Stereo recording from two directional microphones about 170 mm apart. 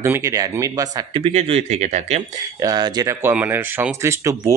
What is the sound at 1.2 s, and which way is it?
Speech, 35° right (ahead or behind).